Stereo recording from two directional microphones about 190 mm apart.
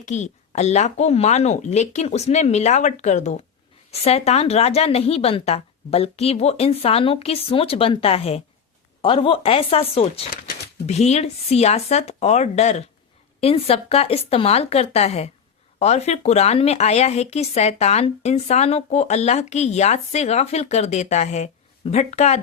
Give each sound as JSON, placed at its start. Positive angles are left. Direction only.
{"t": 0.0, "sound": "speech", "side_deg": 40}